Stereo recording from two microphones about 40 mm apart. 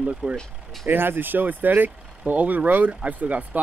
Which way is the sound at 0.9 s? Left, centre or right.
Right.